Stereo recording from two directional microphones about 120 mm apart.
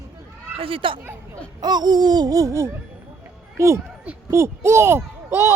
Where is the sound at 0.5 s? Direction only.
50° right (ahead or behind).